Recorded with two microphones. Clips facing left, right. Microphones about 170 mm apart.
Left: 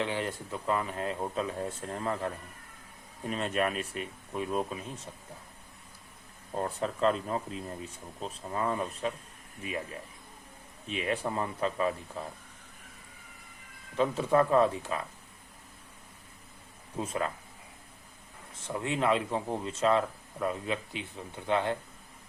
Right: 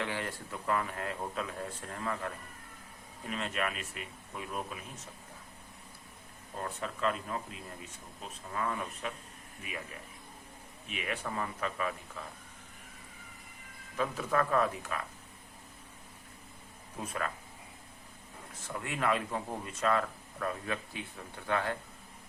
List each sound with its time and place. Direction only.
0.0 s speech: 20° left (ahead or behind)
6.5 s speech: 35° left (ahead or behind)
10.8 s speech: 30° left (ahead or behind)
13.9 s speech: 25° left (ahead or behind)
17.0 s speech: 25° left (ahead or behind)
18.7 s speech: 25° left (ahead or behind)